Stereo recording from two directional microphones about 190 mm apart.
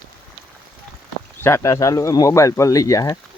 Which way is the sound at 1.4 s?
15° left (ahead or behind).